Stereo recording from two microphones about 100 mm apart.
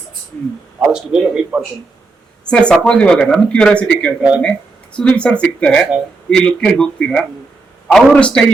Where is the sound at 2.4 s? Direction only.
10° left (ahead or behind).